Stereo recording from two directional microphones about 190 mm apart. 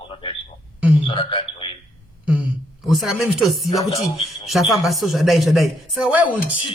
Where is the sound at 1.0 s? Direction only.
30° left (ahead or behind).